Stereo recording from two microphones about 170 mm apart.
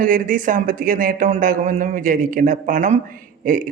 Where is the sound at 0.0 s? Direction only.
50° right (ahead or behind).